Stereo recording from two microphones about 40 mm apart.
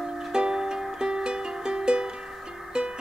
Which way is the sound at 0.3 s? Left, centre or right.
Centre.